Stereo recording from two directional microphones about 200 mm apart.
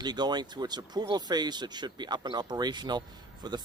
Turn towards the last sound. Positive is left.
turn(degrees=-20)  # may be behind; listen again after turning